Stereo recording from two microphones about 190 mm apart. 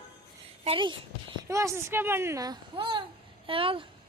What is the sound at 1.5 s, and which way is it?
A child's voice, 15° right (ahead or behind).